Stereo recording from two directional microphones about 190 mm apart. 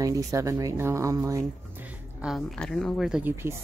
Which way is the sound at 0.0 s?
15° right (ahead or behind).